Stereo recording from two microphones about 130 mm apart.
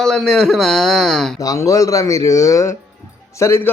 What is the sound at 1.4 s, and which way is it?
Speech, 25° left (ahead or behind).